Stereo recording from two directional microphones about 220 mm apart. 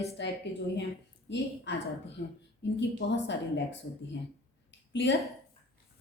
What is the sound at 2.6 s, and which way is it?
Speech, 55° left (ahead or behind).